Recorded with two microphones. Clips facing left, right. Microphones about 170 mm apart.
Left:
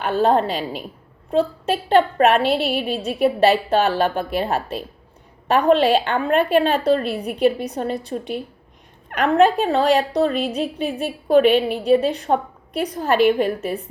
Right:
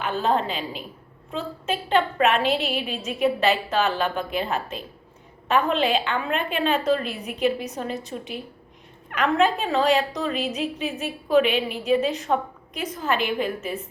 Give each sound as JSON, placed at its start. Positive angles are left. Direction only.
{"t": 0.0, "sound": "a woman's voice", "side_deg": 40}